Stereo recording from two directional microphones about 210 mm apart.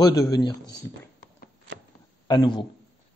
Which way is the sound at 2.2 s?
20° left (ahead or behind).